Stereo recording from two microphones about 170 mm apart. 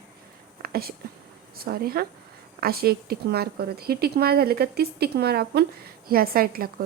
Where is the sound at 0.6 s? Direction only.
60° right (ahead or behind).